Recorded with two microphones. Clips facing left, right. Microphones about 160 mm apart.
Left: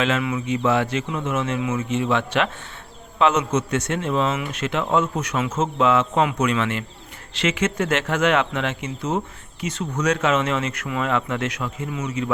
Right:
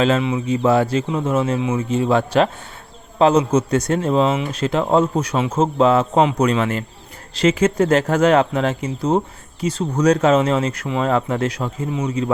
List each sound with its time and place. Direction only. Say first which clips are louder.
0.0 s speech: right 5 dB; 30° right (ahead or behind)